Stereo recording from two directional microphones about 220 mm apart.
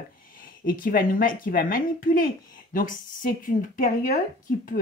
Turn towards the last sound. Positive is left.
turn(degrees=40)  # may be behind; listen again after turning